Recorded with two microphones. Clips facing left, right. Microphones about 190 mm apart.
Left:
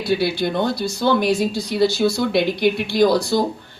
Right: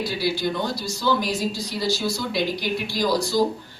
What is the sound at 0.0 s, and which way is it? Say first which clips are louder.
Speech: left 5 dB; 60° left (ahead or behind).